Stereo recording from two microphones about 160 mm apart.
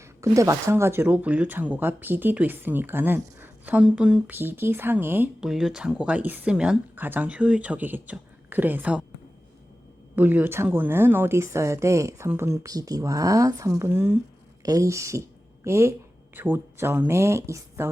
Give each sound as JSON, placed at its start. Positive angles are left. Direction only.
{"t": 0.0, "sound": "speech", "side_deg": -20}
{"t": 10.2, "sound": "speech", "side_deg": -10}